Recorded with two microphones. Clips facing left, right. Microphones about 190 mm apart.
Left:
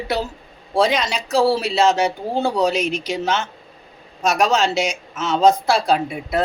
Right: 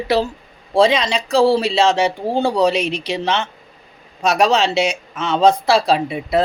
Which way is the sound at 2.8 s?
30° right (ahead or behind).